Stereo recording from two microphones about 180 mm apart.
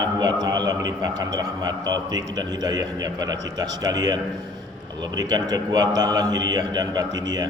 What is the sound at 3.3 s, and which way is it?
Speech, 90° right.